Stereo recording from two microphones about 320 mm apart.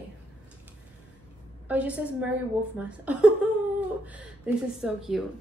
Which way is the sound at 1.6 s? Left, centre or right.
Centre.